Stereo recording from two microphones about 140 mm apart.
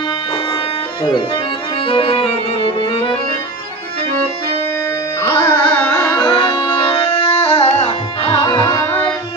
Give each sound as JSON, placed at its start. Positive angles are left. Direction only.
{"t": 1.9, "sound": "music", "side_deg": 40}
{"t": 5.2, "sound": "carnatic music", "side_deg": 15}
{"t": 6.1, "sound": "music", "side_deg": 35}
{"t": 6.9, "sound": "music", "side_deg": 45}
{"t": 8.8, "sound": "music", "side_deg": 15}